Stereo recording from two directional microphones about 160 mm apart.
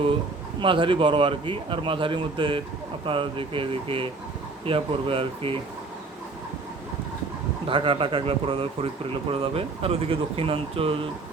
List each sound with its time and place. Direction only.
0.6 s a man's voice: 30° right (ahead or behind)
7.7 s a man's voice: 35° right (ahead or behind)